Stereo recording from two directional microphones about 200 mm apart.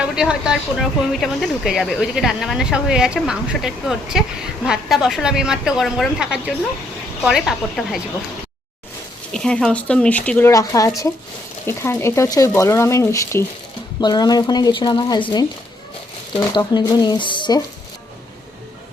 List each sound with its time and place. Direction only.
0.0 s speech: 5° right (ahead or behind)
9.3 s speech: 5° left (ahead or behind); by 15.2 s 20° left (ahead or behind)
16.3 s speech: 20° left (ahead or behind)